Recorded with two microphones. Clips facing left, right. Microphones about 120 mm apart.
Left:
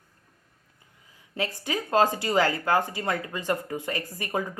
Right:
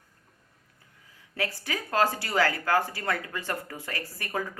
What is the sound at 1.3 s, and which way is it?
A woman's voice, 20° left (ahead or behind).